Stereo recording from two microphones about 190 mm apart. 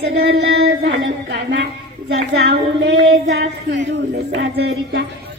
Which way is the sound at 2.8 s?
90° right.